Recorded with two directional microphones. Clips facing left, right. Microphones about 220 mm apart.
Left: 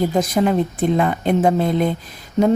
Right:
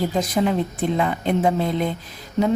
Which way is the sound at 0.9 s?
50° left (ahead or behind).